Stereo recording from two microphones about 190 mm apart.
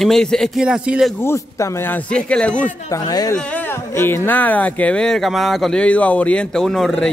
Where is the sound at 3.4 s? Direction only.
10° left (ahead or behind).